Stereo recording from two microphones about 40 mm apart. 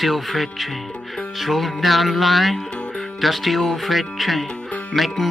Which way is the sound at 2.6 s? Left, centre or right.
Left.